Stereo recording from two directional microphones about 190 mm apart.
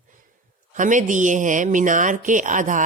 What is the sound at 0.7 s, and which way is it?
Speech, 40° right (ahead or behind).